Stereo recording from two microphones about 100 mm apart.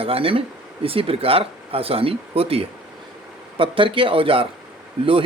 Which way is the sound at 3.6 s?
60° right (ahead or behind).